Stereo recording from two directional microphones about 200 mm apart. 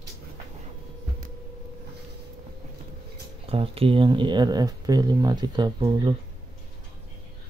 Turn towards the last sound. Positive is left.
turn(degrees=-25)  # may be behind; listen again after turning